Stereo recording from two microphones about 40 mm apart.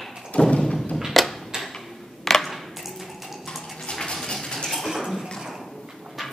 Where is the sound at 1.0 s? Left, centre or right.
Centre.